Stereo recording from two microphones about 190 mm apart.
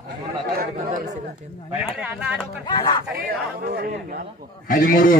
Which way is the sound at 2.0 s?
5° right (ahead or behind).